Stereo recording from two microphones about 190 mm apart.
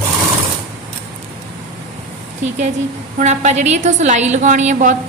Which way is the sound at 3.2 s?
35° right (ahead or behind).